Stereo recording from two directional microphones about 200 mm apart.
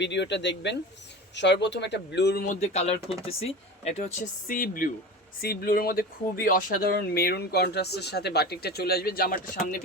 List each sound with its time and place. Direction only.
0.0 s speech: 60° left (ahead or behind)
2.6 s speech: 30° left (ahead or behind); by 9.4 s 50° left (ahead or behind)